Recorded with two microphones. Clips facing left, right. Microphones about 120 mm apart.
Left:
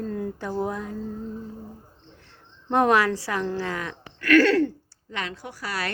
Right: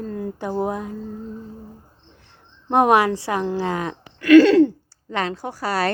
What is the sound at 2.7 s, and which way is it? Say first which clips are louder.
A woman's voice: right 4 dB; 20° right (ahead or behind).